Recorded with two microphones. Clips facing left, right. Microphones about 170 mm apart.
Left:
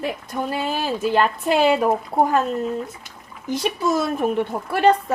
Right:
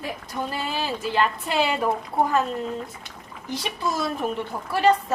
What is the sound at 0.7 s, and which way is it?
A woman's voice, 50° left (ahead or behind).